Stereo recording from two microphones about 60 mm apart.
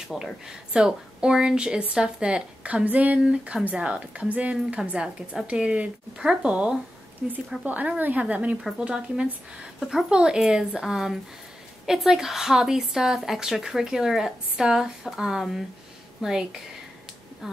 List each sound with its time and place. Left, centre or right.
0.1 s a woman's voice: centre; by 3.2 s right
3.2 s a woman's voice: centre
7.6 s a woman's voice: right
8.7 s a woman's voice: centre